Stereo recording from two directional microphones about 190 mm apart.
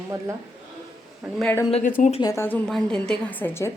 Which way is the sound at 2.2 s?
15° left (ahead or behind).